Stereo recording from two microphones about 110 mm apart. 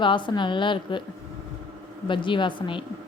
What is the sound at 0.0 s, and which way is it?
A woman's voice, 45° left (ahead or behind).